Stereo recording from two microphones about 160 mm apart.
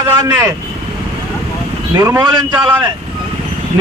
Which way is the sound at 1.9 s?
20° right (ahead or behind).